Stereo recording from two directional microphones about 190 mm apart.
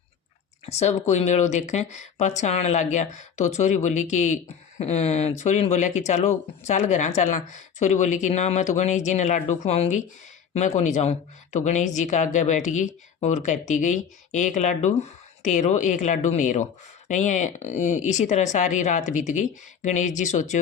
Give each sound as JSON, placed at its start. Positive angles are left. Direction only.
{"t": 0.6, "sound": "speech", "side_deg": 35}